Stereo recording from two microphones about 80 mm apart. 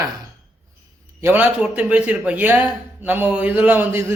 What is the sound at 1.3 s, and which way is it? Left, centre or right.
A man's voice, centre.